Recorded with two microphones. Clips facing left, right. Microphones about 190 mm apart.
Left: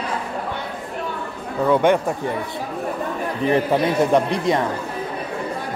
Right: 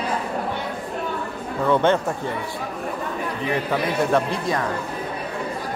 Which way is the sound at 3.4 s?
30° left (ahead or behind).